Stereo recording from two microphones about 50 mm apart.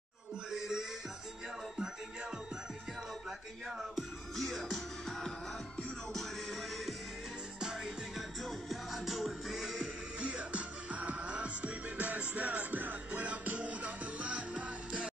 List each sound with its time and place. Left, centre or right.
0.5 s music: centre
3.3 s music: centre
7.6 s music: centre
8.1 s music: centre; by 14.8 s right